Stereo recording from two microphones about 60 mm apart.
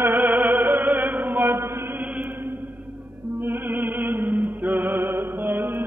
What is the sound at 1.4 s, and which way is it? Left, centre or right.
Chant, right.